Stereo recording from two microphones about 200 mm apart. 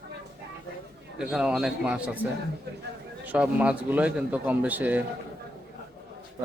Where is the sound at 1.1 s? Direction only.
5° right (ahead or behind).